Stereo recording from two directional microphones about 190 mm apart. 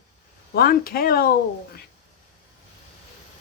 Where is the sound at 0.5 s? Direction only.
50° left (ahead or behind).